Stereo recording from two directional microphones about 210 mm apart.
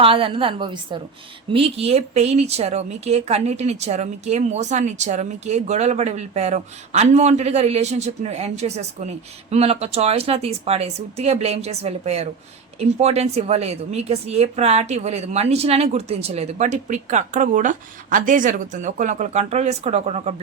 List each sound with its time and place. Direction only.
0.0 s a woman's voice: 25° right (ahead or behind)